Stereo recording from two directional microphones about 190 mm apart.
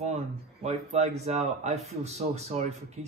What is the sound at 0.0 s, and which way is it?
A man's voice, 35° right (ahead or behind).